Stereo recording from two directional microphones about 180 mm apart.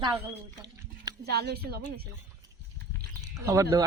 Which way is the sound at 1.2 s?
65° right (ahead or behind).